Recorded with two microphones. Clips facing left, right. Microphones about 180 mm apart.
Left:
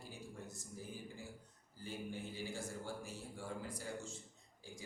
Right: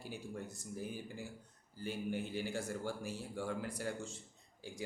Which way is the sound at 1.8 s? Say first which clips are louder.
Right 6 dB; 70° right (ahead or behind).